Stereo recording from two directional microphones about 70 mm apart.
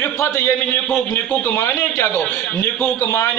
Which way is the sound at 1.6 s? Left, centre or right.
Left.